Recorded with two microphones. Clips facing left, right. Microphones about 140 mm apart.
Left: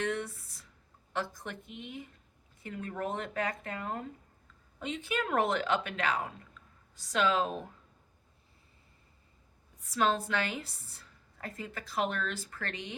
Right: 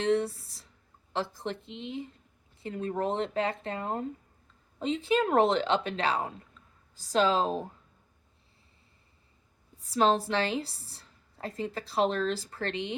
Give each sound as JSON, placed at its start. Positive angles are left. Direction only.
{"t": 0.0, "sound": "a woman's voice", "side_deg": -30}
{"t": 9.8, "sound": "a woman's voice", "side_deg": -30}